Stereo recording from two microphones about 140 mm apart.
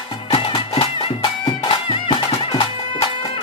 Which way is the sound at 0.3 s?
45° left (ahead or behind).